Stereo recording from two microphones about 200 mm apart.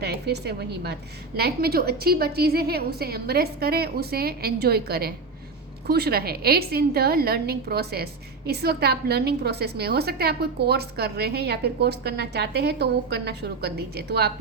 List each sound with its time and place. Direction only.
0.0 s a woman's voice: 55° right (ahead or behind)